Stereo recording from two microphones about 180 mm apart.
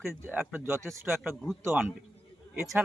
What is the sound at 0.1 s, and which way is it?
A man's voice, 10° right (ahead or behind).